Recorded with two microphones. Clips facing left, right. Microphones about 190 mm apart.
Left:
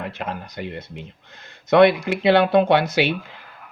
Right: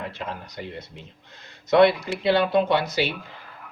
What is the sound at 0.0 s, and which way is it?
A man's voice, 60° left (ahead or behind).